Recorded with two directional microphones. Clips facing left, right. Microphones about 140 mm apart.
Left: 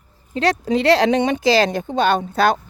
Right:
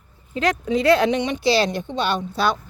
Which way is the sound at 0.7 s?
75° left (ahead or behind).